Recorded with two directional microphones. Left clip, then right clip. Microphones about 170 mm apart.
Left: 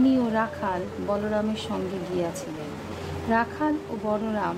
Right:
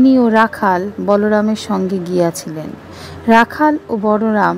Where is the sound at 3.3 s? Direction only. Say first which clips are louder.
Right 14 dB; 60° right (ahead or behind).